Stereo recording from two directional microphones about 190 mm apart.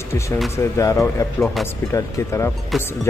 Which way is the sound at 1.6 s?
Centre (ahead or behind).